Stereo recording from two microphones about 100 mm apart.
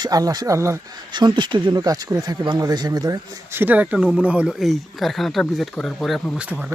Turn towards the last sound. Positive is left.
turn(degrees=-10)  # may be behind; listen again after turning